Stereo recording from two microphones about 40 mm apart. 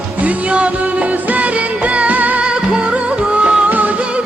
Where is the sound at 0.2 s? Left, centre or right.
Right.